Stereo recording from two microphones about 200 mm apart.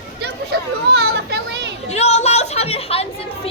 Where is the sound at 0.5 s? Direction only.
55° right (ahead or behind).